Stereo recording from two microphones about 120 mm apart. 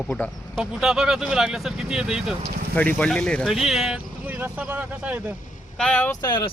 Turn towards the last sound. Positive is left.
turn(degrees=40)  # may be behind; listen again after turning